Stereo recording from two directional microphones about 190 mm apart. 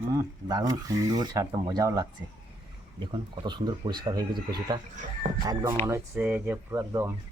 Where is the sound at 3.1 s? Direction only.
25° right (ahead or behind).